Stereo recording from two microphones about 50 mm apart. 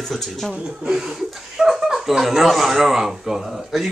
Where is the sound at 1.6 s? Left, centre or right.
Centre.